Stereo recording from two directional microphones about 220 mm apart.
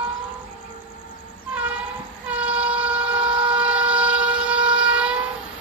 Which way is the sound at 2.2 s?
5° right (ahead or behind).